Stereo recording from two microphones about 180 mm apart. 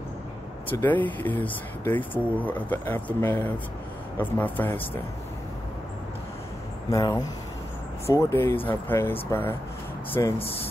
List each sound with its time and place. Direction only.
0.7 s speech: 10° left (ahead or behind)
6.9 s speech: 20° left (ahead or behind)